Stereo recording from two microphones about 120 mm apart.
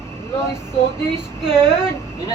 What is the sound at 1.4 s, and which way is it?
Speech, 5° right (ahead or behind).